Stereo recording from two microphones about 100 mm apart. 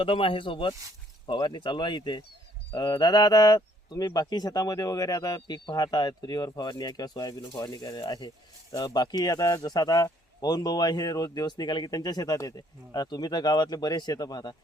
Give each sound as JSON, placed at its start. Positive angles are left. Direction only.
{"t": 0.0, "sound": "speech", "side_deg": 60}
{"t": 1.3, "sound": "speech", "side_deg": 50}